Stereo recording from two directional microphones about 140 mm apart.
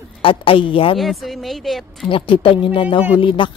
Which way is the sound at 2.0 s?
40° left (ahead or behind).